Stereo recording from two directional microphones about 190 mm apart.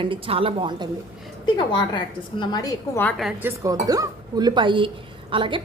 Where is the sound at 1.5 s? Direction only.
25° left (ahead or behind); by 3.3 s 5° left (ahead or behind).